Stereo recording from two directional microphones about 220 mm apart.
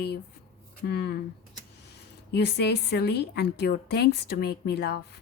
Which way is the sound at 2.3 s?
50° left (ahead or behind).